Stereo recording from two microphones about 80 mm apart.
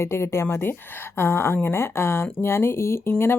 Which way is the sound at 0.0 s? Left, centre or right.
Left.